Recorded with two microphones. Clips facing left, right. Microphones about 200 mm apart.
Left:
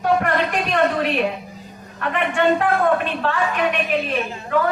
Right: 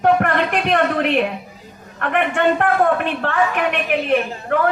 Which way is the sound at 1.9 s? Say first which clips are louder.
Right 2 dB; 60° right (ahead or behind).